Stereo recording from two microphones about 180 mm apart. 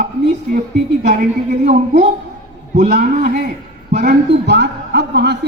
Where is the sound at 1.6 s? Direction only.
50° right (ahead or behind).